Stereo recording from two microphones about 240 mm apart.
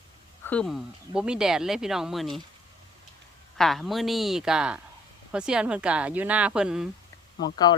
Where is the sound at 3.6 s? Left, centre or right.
Centre.